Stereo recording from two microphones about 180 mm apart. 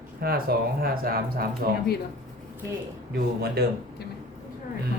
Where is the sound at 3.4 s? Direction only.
65° right (ahead or behind).